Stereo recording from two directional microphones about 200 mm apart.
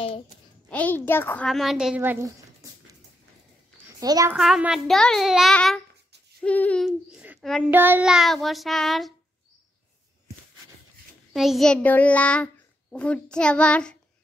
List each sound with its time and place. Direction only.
0.7 s a child's voice: 10° left (ahead or behind); by 2.3 s 10° right (ahead or behind)
4.0 s a child's voice: 15° right (ahead or behind)
4.4 s a child's voice: 5° right (ahead or behind)
11.3 s a child's voice: centre (ahead or behind)